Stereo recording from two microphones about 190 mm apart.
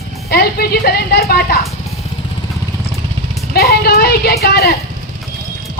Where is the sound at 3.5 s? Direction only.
55° left (ahead or behind).